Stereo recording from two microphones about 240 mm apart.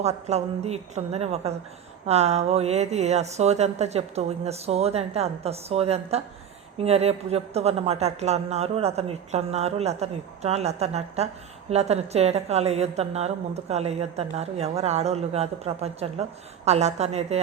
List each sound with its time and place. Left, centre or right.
0.0 s speech: right